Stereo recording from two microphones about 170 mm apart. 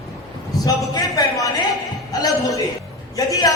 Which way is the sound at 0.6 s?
20° left (ahead or behind).